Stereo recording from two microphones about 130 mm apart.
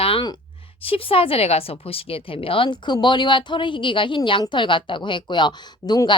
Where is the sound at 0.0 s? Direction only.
45° left (ahead or behind).